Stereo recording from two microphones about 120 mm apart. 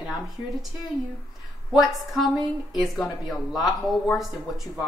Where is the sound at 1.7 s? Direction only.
Centre (ahead or behind).